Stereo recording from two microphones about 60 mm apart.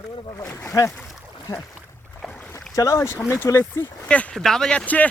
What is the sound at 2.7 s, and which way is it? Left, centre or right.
Speech, left.